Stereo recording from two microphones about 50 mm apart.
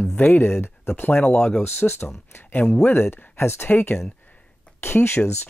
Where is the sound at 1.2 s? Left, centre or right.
Left.